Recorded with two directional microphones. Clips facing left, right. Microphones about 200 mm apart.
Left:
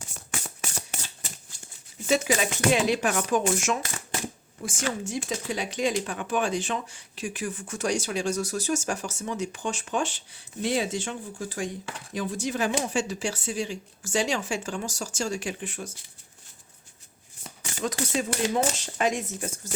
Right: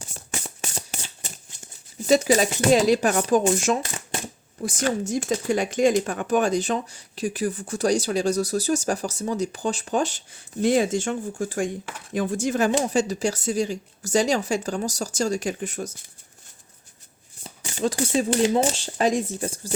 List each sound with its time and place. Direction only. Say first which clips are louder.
0.4 s music: right 2 dB; 30° right (ahead or behind)
1.5 s a sound: right 2 dB; 20° right (ahead or behind)
2.0 s speech: right 6 dB; 35° right (ahead or behind)
17.4 s speech: right 6 dB; 30° right (ahead or behind)